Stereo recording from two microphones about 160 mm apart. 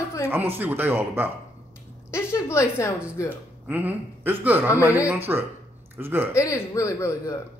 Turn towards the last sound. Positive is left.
turn(degrees=15)  # may be behind; listen again after turning